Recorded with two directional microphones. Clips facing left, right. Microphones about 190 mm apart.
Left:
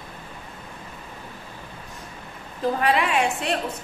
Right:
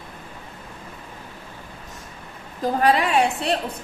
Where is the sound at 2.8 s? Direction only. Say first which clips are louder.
Right 4 dB; 35° right (ahead or behind).